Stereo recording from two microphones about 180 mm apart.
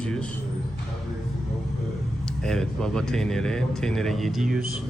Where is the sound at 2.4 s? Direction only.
5° left (ahead or behind).